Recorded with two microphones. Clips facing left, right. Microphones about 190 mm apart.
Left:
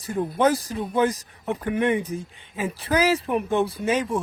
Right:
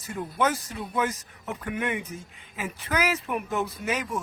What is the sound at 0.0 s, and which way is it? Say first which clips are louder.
Speech: left 6 dB; 30° left (ahead or behind).